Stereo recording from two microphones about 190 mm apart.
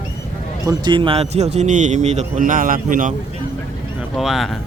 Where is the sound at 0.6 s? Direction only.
20° right (ahead or behind); by 3.2 s 45° right (ahead or behind).